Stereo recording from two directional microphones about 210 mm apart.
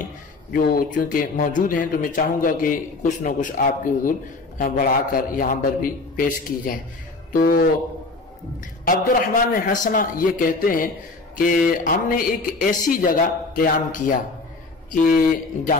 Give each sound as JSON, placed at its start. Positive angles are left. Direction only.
{"t": 0.5, "sound": "speech", "side_deg": 45}
{"t": 8.8, "sound": "speech", "side_deg": 40}